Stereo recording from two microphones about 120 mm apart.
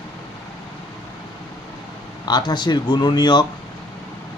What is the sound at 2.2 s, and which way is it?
Speech, 35° left (ahead or behind).